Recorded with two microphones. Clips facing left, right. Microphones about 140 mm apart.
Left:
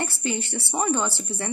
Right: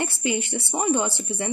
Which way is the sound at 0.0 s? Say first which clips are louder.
Right 2 dB; 15° right (ahead or behind).